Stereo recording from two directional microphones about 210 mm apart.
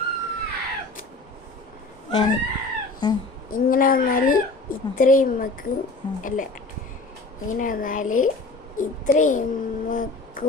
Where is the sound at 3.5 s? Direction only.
40° left (ahead or behind).